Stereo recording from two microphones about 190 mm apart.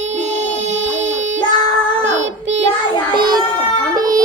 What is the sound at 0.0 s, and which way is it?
Child singing, 35° right (ahead or behind).